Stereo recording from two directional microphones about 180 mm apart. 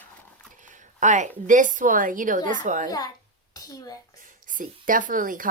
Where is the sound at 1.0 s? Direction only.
45° right (ahead or behind).